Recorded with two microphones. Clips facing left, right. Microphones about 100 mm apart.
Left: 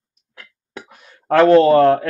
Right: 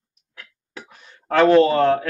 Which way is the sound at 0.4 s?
45° left (ahead or behind).